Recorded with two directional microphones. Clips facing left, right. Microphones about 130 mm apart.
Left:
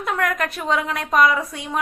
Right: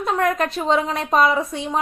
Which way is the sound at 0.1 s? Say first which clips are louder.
Right 3 dB; 25° right (ahead or behind).